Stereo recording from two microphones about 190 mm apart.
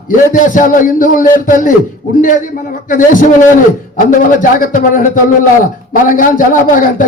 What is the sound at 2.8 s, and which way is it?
A man's voice, 45° left (ahead or behind).